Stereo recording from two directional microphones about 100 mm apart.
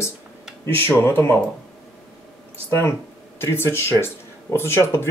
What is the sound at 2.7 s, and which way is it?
Speech, 25° left (ahead or behind).